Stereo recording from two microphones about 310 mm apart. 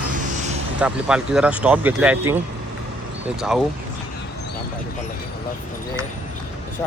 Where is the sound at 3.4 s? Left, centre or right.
Centre.